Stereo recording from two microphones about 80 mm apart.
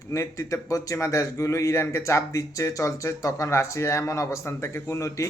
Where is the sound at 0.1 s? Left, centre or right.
Left.